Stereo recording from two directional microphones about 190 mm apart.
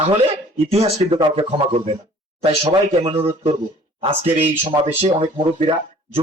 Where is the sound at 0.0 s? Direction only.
30° right (ahead or behind).